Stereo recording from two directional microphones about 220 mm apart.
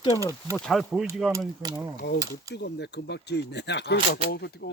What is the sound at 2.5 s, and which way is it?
Speech, 50° left (ahead or behind).